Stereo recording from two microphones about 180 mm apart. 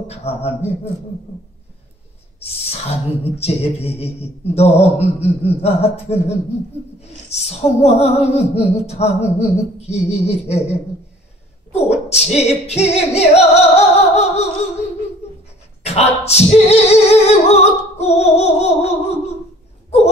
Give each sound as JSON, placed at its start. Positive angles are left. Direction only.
{"t": 0.1, "sound": "singing", "side_deg": 35}
{"t": 2.4, "sound": "singing", "side_deg": 35}
{"t": 15.8, "sound": "singing", "side_deg": 35}